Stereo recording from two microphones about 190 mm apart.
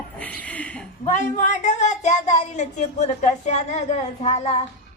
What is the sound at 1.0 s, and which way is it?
Speech, 40° left (ahead or behind).